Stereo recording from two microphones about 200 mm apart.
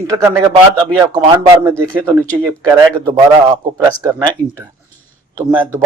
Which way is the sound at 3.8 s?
20° right (ahead or behind).